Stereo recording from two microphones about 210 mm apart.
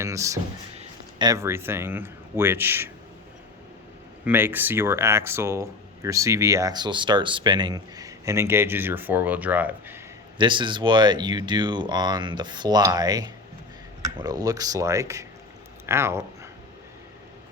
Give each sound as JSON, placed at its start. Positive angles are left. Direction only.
{"t": 0.0, "sound": "a sound", "side_deg": -15}
{"t": 1.2, "sound": "speech", "side_deg": -15}
{"t": 4.3, "sound": "speech", "side_deg": -10}
{"t": 10.3, "sound": "speech", "side_deg": -20}